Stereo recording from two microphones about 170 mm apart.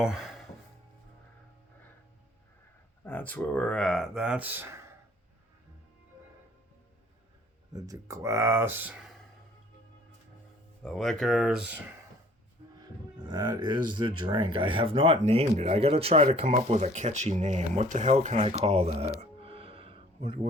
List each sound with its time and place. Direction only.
0.0 s music: centre (ahead or behind)
3.0 s speech: 10° left (ahead or behind); by 4.8 s 10° right (ahead or behind)
7.7 s speech: 20° right (ahead or behind)
10.8 s speech: centre (ahead or behind)
13.1 s speech: 25° right (ahead or behind)
19.2 s music: 35° right (ahead or behind)